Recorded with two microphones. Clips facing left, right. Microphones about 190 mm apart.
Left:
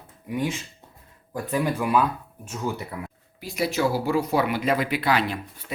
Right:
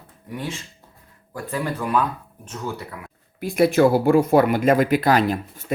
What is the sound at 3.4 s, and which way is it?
Speech, 55° right (ahead or behind).